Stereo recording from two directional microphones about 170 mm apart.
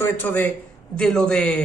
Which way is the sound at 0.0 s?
10° left (ahead or behind).